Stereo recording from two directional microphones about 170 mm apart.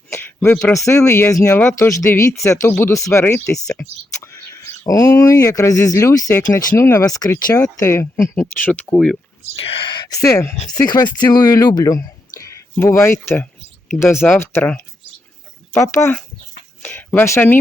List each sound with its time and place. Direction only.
0.1 s speech: 10° left (ahead or behind)
9.6 s speech: 30° left (ahead or behind)
12.4 s a sound: 15° left (ahead or behind)
13.2 s speech: 15° left (ahead or behind)